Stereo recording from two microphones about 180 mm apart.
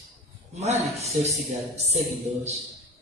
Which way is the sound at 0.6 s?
40° right (ahead or behind).